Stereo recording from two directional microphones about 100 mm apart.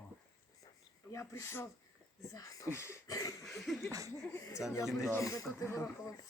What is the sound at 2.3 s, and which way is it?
Speech, 35° left (ahead or behind).